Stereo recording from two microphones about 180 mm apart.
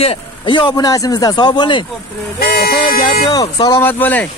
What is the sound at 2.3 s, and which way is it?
Speech, 60° left (ahead or behind).